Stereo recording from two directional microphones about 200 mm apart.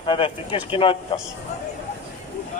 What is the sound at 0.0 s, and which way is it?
Speech, 25° left (ahead or behind).